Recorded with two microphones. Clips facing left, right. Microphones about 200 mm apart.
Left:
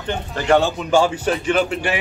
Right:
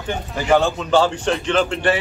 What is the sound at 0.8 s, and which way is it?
Speech, 10° left (ahead or behind).